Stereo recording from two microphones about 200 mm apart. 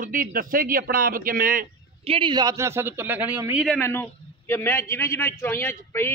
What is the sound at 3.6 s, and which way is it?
A man's voice, 10° left (ahead or behind).